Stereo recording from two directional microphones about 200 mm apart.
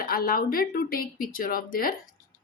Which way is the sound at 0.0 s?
45° left (ahead or behind).